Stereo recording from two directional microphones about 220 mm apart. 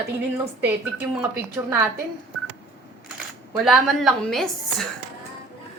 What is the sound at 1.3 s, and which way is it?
Speech, 15° right (ahead or behind).